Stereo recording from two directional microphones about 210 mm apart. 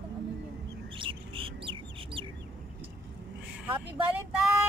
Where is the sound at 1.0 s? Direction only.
25° right (ahead or behind).